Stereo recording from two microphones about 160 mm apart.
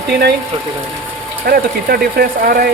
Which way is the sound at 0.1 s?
90° right.